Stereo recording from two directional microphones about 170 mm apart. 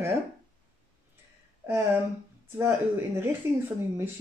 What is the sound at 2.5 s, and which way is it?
Speech, 15° right (ahead or behind).